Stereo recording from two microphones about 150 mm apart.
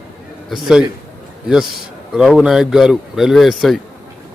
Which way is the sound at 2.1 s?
5° right (ahead or behind).